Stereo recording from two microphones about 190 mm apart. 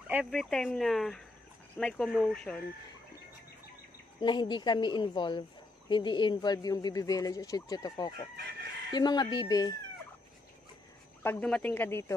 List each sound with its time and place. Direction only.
0.1 s speech: centre (ahead or behind)
4.2 s speech: 25° left (ahead or behind)
11.2 s speech: 5° left (ahead or behind)